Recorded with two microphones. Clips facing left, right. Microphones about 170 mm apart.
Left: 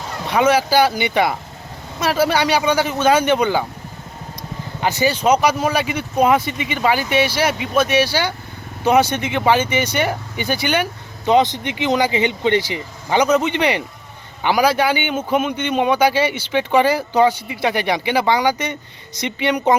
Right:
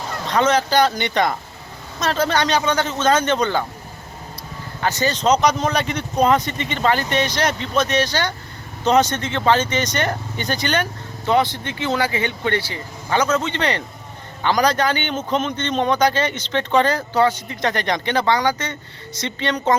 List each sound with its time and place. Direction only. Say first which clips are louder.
0.3 s a man's voice: left 2 dB; 10° left (ahead or behind)
4.8 s a man's voice: left 2 dB; 15° left (ahead or behind)